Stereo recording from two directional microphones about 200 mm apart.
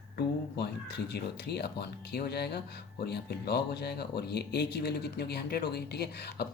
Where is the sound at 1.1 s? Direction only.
55° left (ahead or behind).